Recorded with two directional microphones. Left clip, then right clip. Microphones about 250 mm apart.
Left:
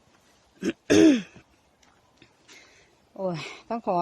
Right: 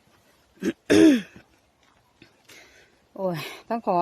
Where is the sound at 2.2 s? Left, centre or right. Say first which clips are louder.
Right 2 dB; centre.